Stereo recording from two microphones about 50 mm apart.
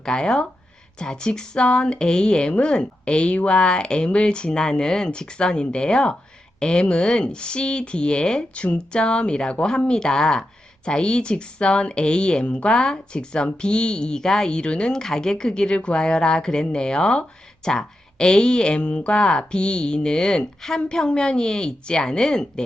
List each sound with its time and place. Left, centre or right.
0.0 s speech: centre